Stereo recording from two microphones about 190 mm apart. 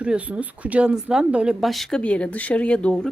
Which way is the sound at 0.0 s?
5° right (ahead or behind).